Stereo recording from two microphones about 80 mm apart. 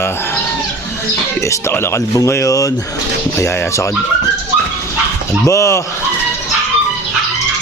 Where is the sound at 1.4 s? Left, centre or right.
Left.